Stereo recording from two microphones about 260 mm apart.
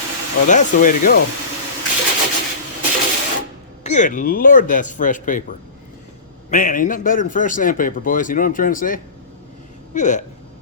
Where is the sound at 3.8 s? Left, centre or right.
Left.